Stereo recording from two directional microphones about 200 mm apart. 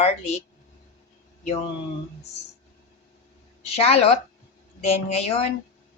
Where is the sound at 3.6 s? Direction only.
30° left (ahead or behind).